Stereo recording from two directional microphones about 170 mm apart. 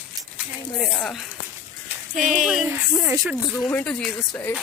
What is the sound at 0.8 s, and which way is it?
Speech, centre (ahead or behind).